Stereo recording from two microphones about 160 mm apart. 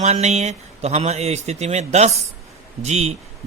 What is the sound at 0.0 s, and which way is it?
Speech, 45° right (ahead or behind).